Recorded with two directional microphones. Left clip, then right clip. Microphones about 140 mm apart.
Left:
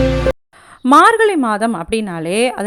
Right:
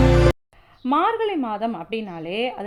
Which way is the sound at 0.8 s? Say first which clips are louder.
Left 11 dB; 50° left (ahead or behind).